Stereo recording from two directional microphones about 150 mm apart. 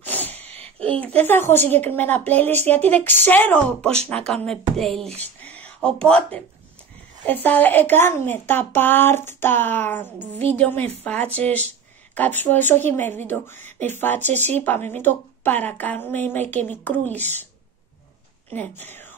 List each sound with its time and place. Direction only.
0.0 s sneeze: 10° left (ahead or behind)
0.7 s a woman's voice: 10° left (ahead or behind)
5.4 s a sound: 10° left (ahead or behind)
7.2 s a woman's voice: 10° left (ahead or behind)
18.5 s speech: 10° left (ahead or behind)